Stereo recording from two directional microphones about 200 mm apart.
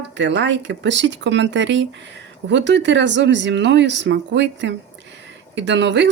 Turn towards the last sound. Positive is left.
turn(degrees=-60)  # may be behind; listen again after turning